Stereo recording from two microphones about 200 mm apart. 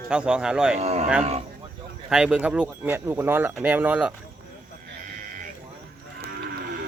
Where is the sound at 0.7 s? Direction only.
35° right (ahead or behind).